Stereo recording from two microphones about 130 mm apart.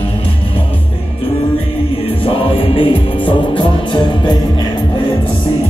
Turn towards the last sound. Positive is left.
turn(degrees=40)  # may be behind; listen again after turning